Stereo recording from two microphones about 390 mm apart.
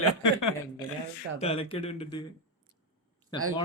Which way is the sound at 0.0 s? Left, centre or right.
Left.